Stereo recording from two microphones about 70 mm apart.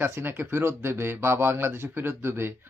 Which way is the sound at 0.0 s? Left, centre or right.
Right.